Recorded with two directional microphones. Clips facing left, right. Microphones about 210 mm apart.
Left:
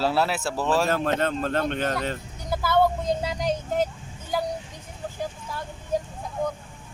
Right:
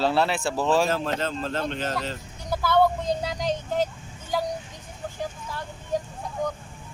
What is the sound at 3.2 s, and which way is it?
Speech, 5° left (ahead or behind).